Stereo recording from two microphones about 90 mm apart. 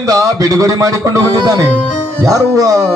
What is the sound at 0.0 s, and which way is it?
Speech, 40° right (ahead or behind).